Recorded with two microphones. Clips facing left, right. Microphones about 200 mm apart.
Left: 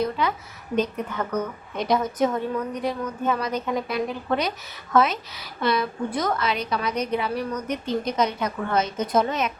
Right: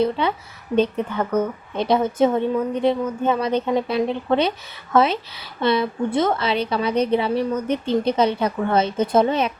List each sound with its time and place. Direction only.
0.0 s a woman's voice: 30° right (ahead or behind)